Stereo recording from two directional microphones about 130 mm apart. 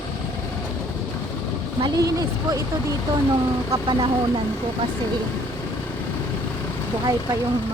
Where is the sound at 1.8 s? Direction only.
30° right (ahead or behind).